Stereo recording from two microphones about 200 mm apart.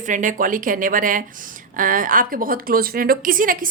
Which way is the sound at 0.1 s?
40° right (ahead or behind).